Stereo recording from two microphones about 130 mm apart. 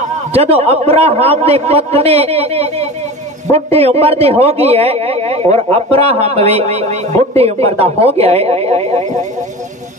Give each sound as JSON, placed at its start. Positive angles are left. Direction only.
{"t": 0.3, "sound": "a man's voice", "side_deg": -50}